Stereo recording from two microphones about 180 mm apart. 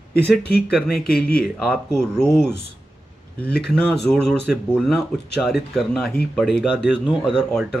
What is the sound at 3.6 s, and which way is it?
Speech, 5° left (ahead or behind).